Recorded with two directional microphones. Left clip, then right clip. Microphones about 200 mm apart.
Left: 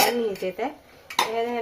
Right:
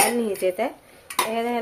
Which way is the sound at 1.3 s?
45° right (ahead or behind).